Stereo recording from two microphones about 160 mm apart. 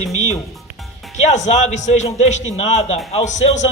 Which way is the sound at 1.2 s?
45° left (ahead or behind).